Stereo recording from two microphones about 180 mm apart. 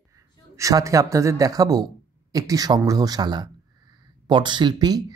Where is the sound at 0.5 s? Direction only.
15° right (ahead or behind).